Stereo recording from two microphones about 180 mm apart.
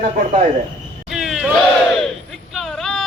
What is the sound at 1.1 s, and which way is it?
Crowd, centre (ahead or behind).